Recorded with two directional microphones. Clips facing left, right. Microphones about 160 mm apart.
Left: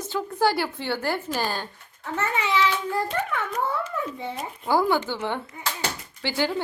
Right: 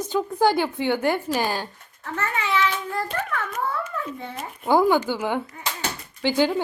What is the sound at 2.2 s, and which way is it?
A child's voice, 20° left (ahead or behind).